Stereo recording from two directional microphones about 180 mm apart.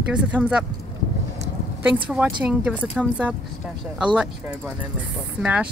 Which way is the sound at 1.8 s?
10° right (ahead or behind).